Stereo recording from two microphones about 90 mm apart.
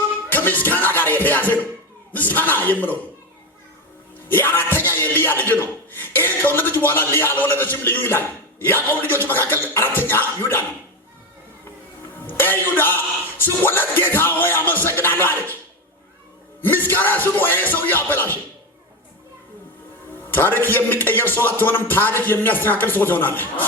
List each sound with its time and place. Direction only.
0.3 s music: 20° left (ahead or behind)
2.1 s speech: 20° left (ahead or behind)
4.3 s speech: 25° left (ahead or behind)
12.2 s speech: 20° left (ahead or behind)
16.6 s speech: 20° left (ahead or behind)
20.3 s speech: 20° left (ahead or behind)